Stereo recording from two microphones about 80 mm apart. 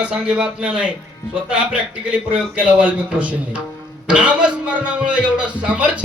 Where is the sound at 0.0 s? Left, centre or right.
Centre.